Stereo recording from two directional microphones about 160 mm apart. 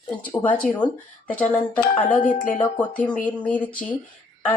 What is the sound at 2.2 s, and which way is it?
Speech, 55° left (ahead or behind).